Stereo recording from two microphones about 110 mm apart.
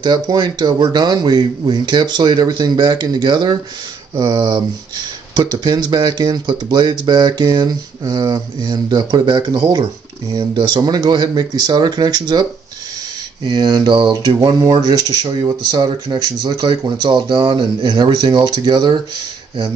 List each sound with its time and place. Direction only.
0.0 s speech: 40° right (ahead or behind)